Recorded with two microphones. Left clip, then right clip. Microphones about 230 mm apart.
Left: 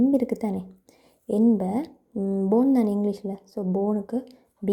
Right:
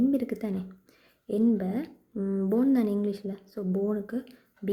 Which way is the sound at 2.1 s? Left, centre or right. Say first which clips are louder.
Left 4 dB; left.